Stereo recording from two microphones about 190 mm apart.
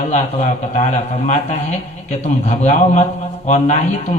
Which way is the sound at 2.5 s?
40° left (ahead or behind).